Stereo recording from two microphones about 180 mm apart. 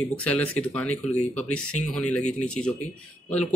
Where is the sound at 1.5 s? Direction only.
5° left (ahead or behind).